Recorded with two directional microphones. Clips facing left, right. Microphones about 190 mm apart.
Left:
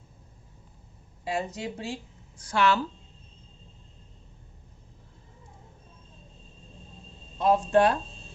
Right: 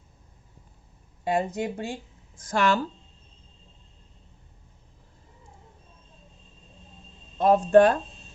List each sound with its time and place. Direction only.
1.2 s speech: 55° right (ahead or behind)
7.3 s speech: 55° right (ahead or behind)